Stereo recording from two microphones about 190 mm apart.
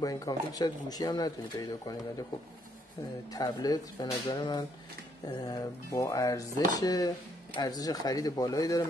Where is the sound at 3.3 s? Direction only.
20° left (ahead or behind).